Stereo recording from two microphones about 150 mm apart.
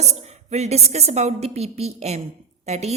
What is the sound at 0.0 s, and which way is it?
A woman's voice, 45° right (ahead or behind).